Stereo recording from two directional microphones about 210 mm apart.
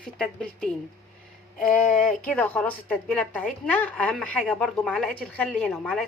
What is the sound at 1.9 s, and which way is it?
Speech, 40° left (ahead or behind).